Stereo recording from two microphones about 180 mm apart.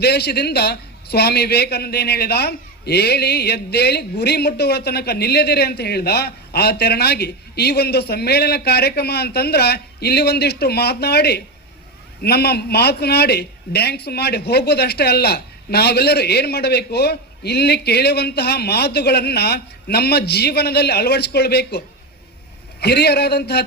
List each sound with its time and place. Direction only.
0.0 s a man's voice: 65° left (ahead or behind)
22.8 s a man's voice: 65° left (ahead or behind)